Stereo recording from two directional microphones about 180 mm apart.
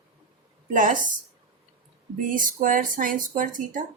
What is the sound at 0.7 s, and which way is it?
Speech, 45° right (ahead or behind).